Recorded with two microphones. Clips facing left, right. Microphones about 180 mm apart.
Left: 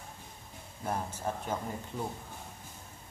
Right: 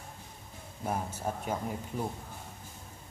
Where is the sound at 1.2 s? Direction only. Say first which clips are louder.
Right 1 dB; 10° right (ahead or behind).